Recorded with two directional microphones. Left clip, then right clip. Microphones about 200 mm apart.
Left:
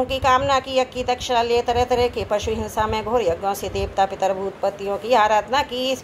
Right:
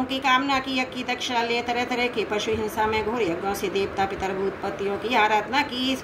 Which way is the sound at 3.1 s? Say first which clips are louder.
Left 5 dB; 60° left (ahead or behind).